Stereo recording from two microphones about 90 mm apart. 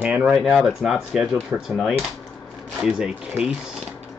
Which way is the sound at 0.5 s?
Centre (ahead or behind).